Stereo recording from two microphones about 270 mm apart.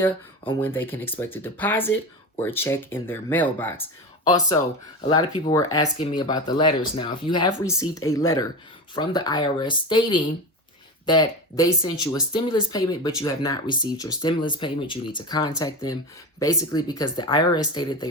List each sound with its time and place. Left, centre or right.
0.6 s speech: centre